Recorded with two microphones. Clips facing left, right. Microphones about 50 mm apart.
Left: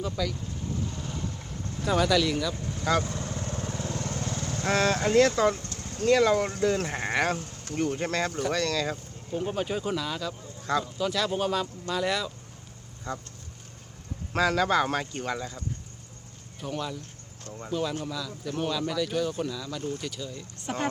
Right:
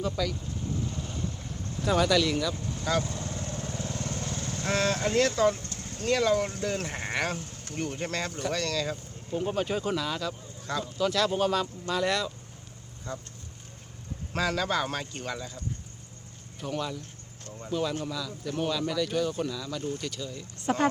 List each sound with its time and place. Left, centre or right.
0.0 s speech: centre
0.9 s vehicle: left
1.8 s speech: centre
2.5 s vehicle: left
5.5 s vehicle: right
5.9 s speech: left
9.3 s speech: centre
13.1 s speech: left
14.3 s speech: left
16.6 s speech: centre